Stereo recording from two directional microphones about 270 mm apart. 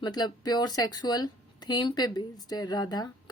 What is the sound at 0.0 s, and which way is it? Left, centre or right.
Speech, centre.